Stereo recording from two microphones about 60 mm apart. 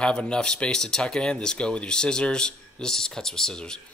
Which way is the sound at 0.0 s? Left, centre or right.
Centre.